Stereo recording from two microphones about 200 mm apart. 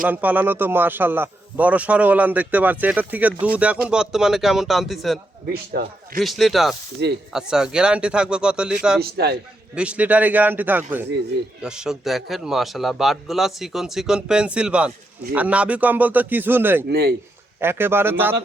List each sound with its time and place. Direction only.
0.1 s a man's voice: 10° right (ahead or behind)
5.5 s a man's voice: 50° right (ahead or behind)
6.1 s a man's voice: centre (ahead or behind)
7.0 s speech: 60° right (ahead or behind)
7.3 s a man's voice: 5° right (ahead or behind)
9.0 s a man's voice: 55° right (ahead or behind)
9.7 s a man's voice: 5° right (ahead or behind)
16.9 s a man's voice: 55° right (ahead or behind)
17.6 s a man's voice: 10° right (ahead or behind)